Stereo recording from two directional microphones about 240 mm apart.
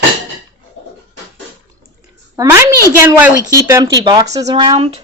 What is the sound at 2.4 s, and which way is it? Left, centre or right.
A woman's voice, centre.